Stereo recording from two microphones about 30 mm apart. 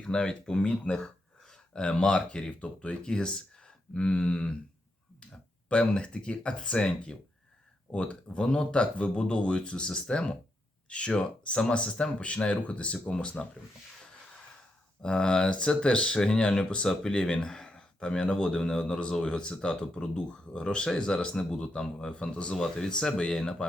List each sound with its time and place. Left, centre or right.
0.0 s speech: left
0.6 s speech: left
1.5 s speech: left
2.5 s speech: left
3.0 s speech: left
5.6 s speech: left
10.8 s speech: left
12.2 s speech: left
15.0 s speech: left